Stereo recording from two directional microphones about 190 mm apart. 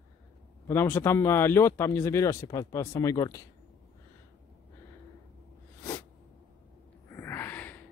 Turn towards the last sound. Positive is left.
turn(degrees=10)  # may be behind; listen again after turning